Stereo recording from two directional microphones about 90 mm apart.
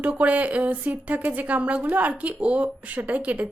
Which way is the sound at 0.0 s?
15° right (ahead or behind).